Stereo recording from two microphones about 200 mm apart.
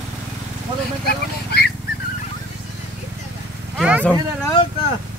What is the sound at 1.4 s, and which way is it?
Wild animals, 50° left (ahead or behind).